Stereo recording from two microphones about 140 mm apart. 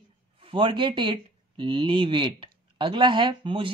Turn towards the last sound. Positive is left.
turn(degrees=-35)  # may be behind; listen again after turning